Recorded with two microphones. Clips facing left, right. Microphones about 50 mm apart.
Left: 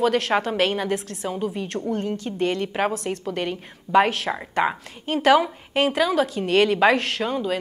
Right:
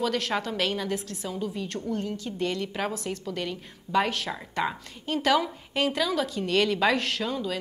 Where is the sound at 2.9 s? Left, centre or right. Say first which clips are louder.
Left 5 dB; left.